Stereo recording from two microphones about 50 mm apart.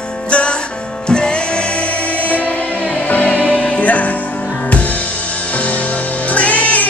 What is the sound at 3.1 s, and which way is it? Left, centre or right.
Music, left.